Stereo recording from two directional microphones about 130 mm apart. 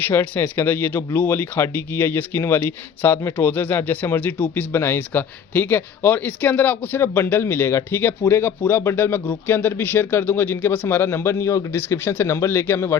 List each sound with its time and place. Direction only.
0.0 s speech: 15° left (ahead or behind)